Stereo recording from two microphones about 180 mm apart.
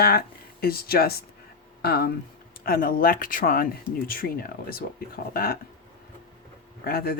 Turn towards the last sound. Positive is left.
turn(degrees=60)  # may be behind; listen again after turning